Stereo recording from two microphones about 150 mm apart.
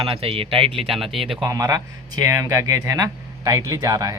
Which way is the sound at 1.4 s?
20° right (ahead or behind).